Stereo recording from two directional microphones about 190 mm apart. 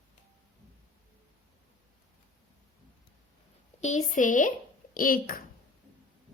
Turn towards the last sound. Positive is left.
turn(degrees=50)  # may be behind; listen again after turning